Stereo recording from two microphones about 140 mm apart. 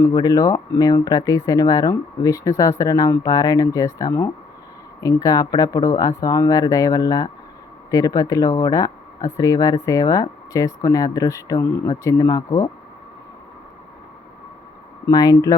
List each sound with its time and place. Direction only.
0.1 s speech: 25° left (ahead or behind)
15.0 s speech: 25° left (ahead or behind)